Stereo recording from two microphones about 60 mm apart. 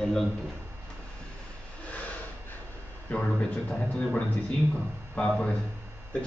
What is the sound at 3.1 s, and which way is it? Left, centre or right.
A man's voice, left.